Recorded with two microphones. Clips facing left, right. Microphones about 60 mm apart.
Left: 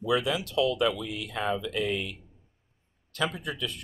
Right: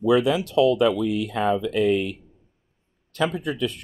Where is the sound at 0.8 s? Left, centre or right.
Right.